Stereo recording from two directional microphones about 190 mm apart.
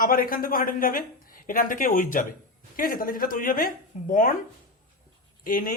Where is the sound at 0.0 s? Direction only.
50° left (ahead or behind).